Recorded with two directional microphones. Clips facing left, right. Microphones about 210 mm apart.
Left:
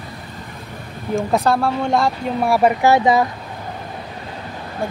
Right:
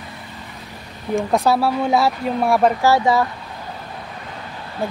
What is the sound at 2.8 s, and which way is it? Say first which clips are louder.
Speech: left 2 dB; 20° left (ahead or behind).